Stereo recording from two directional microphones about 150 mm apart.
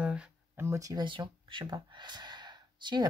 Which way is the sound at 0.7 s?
20° right (ahead or behind).